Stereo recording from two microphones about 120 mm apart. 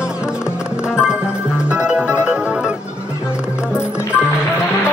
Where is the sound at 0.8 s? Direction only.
5° right (ahead or behind).